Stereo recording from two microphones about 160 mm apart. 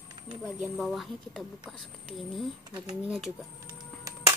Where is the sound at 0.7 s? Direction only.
Centre (ahead or behind).